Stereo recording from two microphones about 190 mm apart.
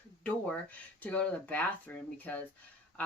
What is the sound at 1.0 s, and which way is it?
Speech, 10° left (ahead or behind).